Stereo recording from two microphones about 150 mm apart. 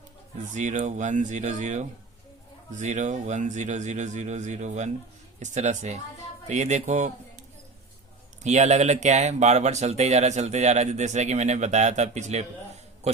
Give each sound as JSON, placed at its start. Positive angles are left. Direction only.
{"t": 0.5, "sound": "speech", "side_deg": -55}
{"t": 8.4, "sound": "speech", "side_deg": -50}